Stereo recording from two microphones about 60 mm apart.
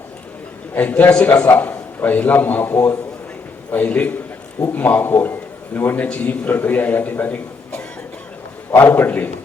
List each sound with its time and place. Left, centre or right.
0.7 s a man's voice: left
6.1 s a man's voice: centre
6.5 s a man's voice: left
8.7 s a man's voice: left